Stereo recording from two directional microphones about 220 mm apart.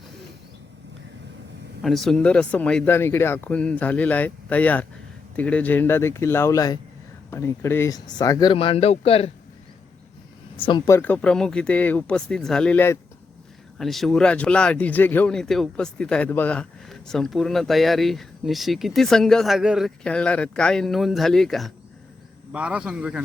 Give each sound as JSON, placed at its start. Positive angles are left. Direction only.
{"t": 1.8, "sound": "speech", "side_deg": 0}
{"t": 10.7, "sound": "speech", "side_deg": 15}